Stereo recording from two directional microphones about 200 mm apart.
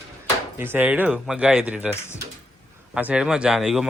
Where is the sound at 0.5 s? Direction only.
10° right (ahead or behind).